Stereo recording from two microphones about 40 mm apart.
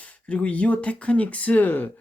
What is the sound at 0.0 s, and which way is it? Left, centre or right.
Speech, left.